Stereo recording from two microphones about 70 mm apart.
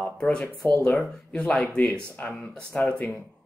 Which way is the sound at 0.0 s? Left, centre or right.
Centre.